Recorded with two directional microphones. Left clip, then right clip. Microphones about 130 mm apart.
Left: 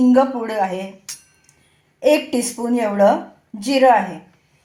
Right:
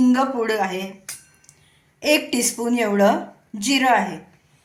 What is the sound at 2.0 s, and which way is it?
A woman's voice, 25° left (ahead or behind).